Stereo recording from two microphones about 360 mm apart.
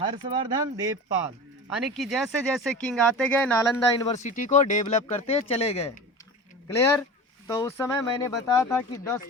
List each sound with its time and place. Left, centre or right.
0.0 s speech: centre
4.1 s speech: centre
7.4 s speech: centre